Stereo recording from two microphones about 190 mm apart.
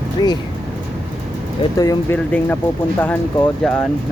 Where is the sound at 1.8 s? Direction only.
20° left (ahead or behind).